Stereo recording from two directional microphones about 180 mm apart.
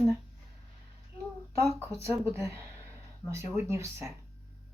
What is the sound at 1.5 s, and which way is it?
Speech, 15° right (ahead or behind).